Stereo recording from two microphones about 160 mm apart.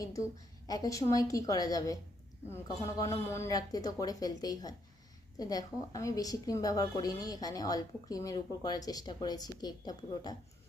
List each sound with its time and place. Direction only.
0.7 s a woman's voice: 20° left (ahead or behind)